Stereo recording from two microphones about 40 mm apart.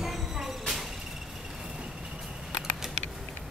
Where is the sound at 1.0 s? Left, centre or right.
Centre.